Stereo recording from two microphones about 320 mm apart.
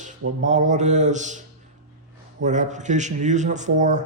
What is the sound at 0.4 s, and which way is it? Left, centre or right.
Speech, right.